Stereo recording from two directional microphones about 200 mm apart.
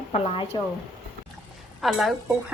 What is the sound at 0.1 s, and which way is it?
Speech, 30° left (ahead or behind).